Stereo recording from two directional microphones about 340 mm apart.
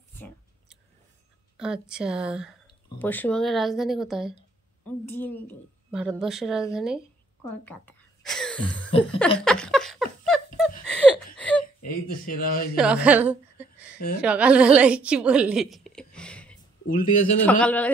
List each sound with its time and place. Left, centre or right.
1.6 s a woman's voice: centre
9.4 s laughter: centre
10.9 s a sound: centre
11.3 s whimper: centre
11.6 s speech: left
12.7 s a woman's voice: centre
16.8 s speech: left
17.4 s a woman's voice: centre